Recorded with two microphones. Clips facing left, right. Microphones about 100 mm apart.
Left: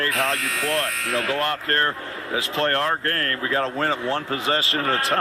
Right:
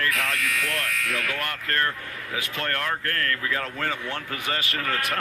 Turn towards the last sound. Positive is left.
turn(degrees=30)  # may be behind; listen again after turning